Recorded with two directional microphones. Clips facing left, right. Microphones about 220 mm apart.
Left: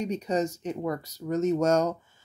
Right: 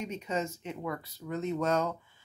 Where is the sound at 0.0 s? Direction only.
40° left (ahead or behind).